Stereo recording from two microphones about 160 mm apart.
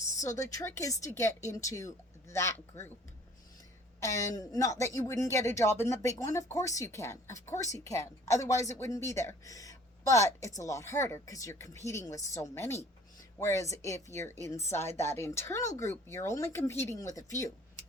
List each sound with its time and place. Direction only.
0.2 s speech: 20° left (ahead or behind)
4.0 s speech: 20° left (ahead or behind)